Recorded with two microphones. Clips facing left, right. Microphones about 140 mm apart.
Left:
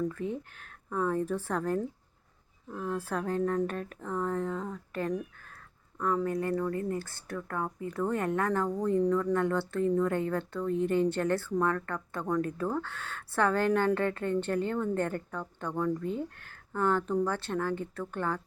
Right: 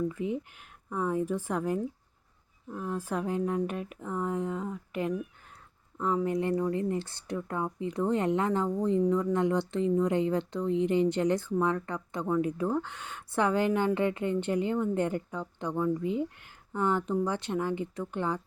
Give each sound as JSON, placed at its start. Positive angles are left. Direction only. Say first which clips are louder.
{"t": 0.1, "sound": "speech", "louder": "right 2 dB", "side_deg": -15}